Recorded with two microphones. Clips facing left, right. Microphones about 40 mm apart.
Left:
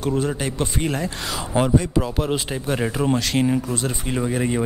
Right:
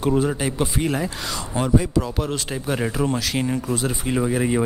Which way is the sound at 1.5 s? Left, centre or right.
Left.